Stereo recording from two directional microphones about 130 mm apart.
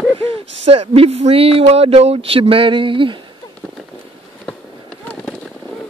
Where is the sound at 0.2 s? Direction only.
50° right (ahead or behind).